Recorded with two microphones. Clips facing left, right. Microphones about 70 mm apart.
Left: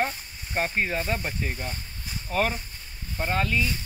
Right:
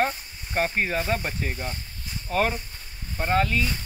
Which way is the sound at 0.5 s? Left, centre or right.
Centre.